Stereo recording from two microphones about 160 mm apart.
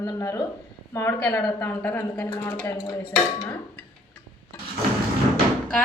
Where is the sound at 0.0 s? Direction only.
20° left (ahead or behind).